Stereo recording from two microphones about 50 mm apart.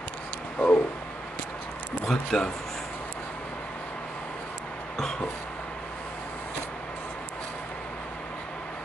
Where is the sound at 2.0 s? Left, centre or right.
Centre.